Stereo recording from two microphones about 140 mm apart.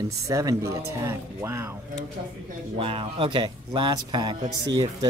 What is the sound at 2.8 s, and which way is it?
Speech, 40° right (ahead or behind).